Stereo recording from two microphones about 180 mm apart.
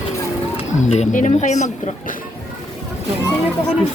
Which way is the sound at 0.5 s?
35° left (ahead or behind).